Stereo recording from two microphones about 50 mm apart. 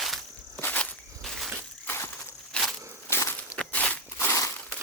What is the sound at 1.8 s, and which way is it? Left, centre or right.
Crushing, left.